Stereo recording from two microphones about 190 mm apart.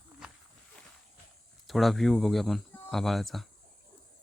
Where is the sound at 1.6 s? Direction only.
Centre (ahead or behind).